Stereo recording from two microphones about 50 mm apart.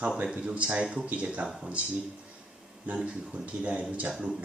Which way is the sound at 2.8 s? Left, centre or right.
Right.